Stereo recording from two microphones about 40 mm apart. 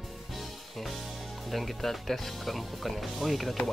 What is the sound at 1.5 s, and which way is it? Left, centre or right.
Speech, centre.